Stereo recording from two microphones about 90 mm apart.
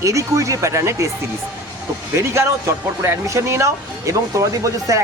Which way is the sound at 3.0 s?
35° right (ahead or behind).